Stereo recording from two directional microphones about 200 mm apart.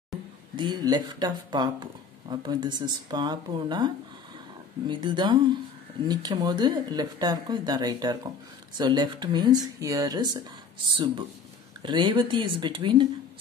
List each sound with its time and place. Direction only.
0.6 s speech: 20° right (ahead or behind)